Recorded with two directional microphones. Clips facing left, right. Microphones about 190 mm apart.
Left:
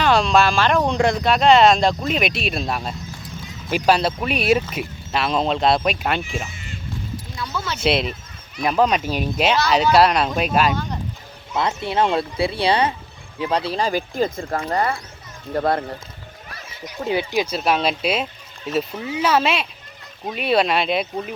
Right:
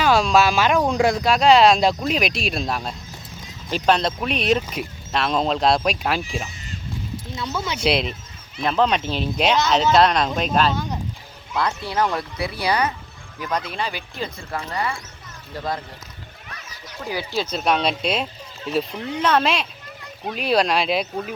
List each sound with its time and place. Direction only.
0.0 s speech: centre (ahead or behind)
7.3 s speech: 20° right (ahead or behind)
7.8 s speech: centre (ahead or behind)
10.8 s speech: 10° right (ahead or behind)
11.5 s speech: 25° left (ahead or behind); by 14.9 s 45° left (ahead or behind)
15.5 s speech: 60° left (ahead or behind)
17.0 s speech: 25° left (ahead or behind)
17.4 s speech: 5° left (ahead or behind)